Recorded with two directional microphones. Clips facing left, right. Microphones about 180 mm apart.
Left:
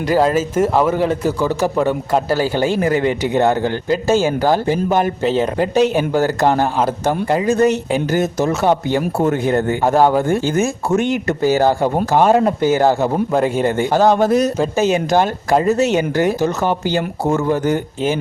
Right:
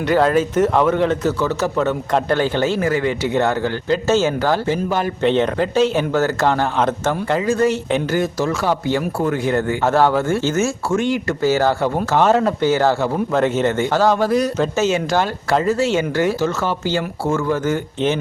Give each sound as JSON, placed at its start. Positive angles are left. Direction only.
{"t": 0.3, "sound": "a man's voice", "side_deg": 5}
{"t": 5.2, "sound": "a man's voice", "side_deg": 5}